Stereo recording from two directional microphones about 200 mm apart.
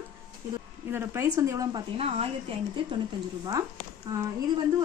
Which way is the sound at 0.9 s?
10° right (ahead or behind).